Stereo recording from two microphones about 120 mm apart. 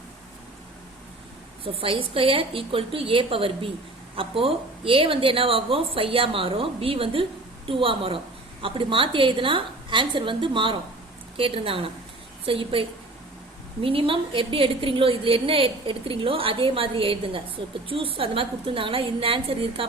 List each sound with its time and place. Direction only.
1.6 s a woman's voice: 50° right (ahead or behind)